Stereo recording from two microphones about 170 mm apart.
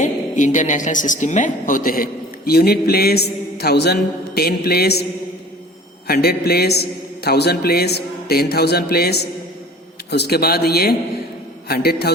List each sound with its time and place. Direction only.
0.0 s a woman's voice: 45° left (ahead or behind); by 5.0 s 70° left (ahead or behind)
6.1 s a man's voice: 65° left (ahead or behind)